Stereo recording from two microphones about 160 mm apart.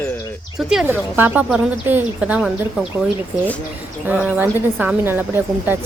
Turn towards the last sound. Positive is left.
turn(degrees=-15)  # may be behind; listen again after turning